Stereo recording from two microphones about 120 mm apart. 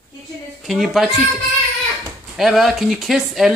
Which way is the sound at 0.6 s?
Centre (ahead or behind).